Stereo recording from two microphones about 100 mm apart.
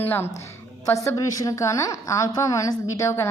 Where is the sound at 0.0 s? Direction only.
20° left (ahead or behind).